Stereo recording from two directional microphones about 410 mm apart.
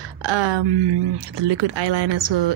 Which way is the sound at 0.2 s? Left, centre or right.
Right.